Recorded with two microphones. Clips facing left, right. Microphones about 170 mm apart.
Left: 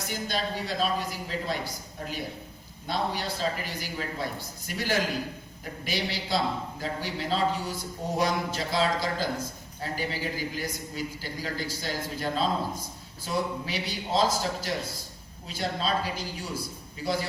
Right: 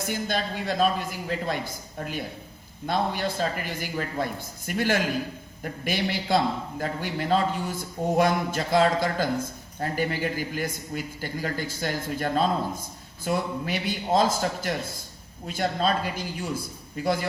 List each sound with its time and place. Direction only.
0.0 s a man's voice: 50° right (ahead or behind)